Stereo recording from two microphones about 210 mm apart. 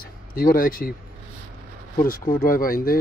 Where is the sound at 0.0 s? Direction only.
45° left (ahead or behind).